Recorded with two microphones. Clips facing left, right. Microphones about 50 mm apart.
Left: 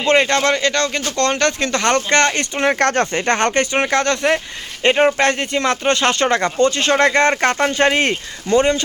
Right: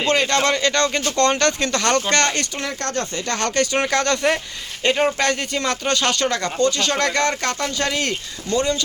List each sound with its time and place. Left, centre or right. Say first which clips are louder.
0.3 s speech: left 2 dB; centre
1.4 s speech: left 2 dB; centre
2.6 s speech: left 9 dB; left
3.3 s speech: left 1 dB; left
3.8 s speech: left 2 dB; centre
4.8 s speech: left 5 dB; left
5.4 s speech: left 5 dB; centre
5.8 s speech: left 3 dB; left